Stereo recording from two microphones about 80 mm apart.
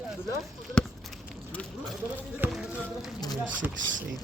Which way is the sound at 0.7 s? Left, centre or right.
Centre.